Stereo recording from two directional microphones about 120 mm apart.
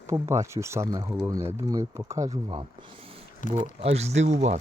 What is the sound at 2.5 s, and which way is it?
Speech, 45° right (ahead or behind).